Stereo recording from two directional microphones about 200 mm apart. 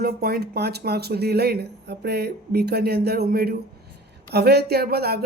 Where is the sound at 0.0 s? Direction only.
50° right (ahead or behind).